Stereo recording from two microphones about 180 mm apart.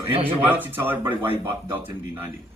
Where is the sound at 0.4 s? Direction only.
10° right (ahead or behind).